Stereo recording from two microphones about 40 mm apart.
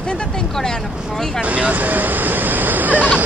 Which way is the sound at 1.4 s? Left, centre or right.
Right.